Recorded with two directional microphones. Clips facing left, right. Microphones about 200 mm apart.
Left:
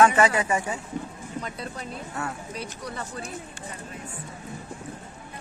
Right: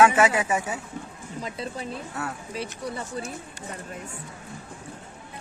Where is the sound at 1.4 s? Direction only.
30° right (ahead or behind).